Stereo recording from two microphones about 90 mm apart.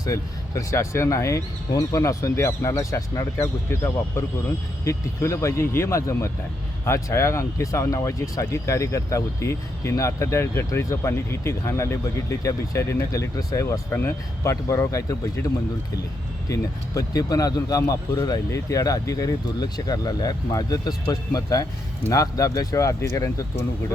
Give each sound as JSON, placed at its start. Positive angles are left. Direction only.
{"t": 0.0, "sound": "a man's voice", "side_deg": 35}